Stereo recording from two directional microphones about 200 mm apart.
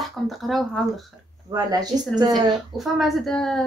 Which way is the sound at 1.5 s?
20° right (ahead or behind).